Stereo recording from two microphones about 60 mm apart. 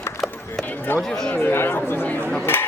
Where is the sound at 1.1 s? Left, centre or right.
Centre.